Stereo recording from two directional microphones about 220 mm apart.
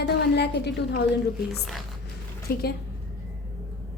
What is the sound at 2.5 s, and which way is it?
Speech, 45° left (ahead or behind).